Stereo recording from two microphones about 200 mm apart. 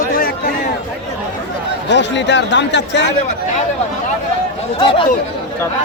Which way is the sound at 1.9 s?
60° left (ahead or behind).